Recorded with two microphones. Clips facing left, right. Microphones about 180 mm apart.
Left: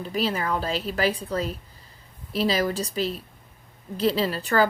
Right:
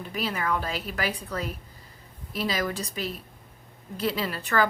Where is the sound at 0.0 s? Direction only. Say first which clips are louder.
Left 4 dB; 30° left (ahead or behind).